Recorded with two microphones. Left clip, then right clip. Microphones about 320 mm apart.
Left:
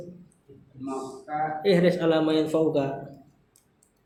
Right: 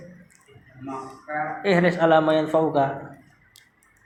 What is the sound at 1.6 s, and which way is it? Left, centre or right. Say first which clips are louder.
Speech: right 3 dB; centre.